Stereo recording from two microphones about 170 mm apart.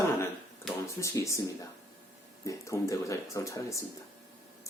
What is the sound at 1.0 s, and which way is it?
Speech, 15° left (ahead or behind).